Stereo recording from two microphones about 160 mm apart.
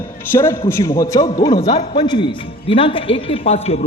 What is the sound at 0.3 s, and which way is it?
A man's voice, 15° left (ahead or behind).